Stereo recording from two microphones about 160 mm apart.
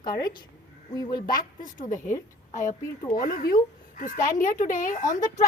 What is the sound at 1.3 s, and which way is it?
A woman's voice, 55° left (ahead or behind).